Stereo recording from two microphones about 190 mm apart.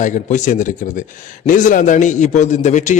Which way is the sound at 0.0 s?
40° left (ahead or behind).